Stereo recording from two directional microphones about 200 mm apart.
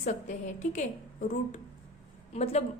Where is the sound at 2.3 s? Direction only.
30° left (ahead or behind).